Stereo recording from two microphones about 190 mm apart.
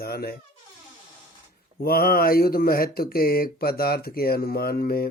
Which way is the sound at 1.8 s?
50° left (ahead or behind).